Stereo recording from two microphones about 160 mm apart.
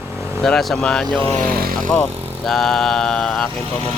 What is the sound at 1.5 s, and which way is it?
Speech, 65° right (ahead or behind).